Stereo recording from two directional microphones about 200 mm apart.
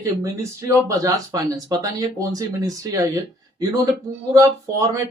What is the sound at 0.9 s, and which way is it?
Speech, 15° right (ahead or behind).